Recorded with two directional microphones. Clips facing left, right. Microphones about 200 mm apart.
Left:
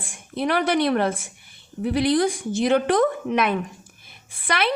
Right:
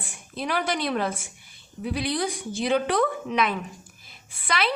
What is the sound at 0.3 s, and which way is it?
A woman's voice, 60° left (ahead or behind).